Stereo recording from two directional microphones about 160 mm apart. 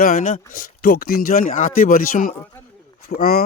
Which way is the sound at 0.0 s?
50° left (ahead or behind).